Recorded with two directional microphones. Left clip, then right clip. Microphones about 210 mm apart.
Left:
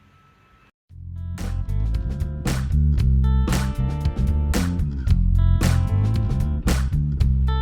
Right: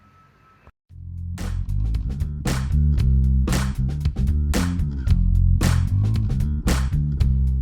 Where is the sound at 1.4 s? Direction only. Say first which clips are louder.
Even; centre (ahead or behind).